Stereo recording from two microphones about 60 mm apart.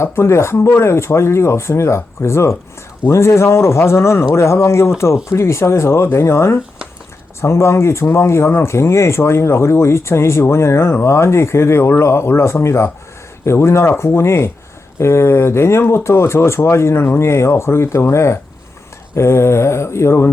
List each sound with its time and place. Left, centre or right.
0.0 s speech: left